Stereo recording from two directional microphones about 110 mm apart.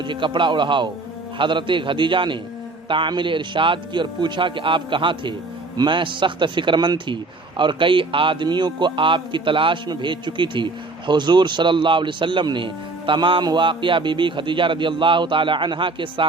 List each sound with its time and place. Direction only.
0.0 s speech: 45° right (ahead or behind)